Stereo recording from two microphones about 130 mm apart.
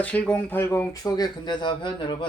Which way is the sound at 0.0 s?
10° left (ahead or behind).